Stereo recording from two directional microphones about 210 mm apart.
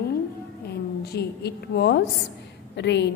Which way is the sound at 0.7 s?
50° left (ahead or behind).